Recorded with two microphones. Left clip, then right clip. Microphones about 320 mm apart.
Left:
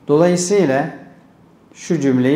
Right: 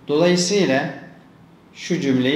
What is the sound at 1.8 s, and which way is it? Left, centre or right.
Speech, left.